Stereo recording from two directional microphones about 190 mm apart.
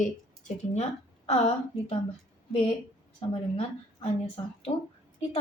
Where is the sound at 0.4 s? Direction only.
40° left (ahead or behind).